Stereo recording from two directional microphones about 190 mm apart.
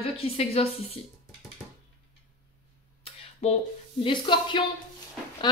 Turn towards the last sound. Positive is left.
turn(degrees=25)  # may be behind; listen again after turning